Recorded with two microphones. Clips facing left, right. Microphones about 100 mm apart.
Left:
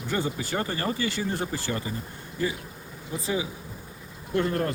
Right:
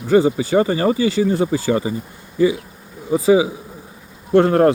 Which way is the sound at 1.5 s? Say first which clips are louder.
Right 12 dB; 90° right.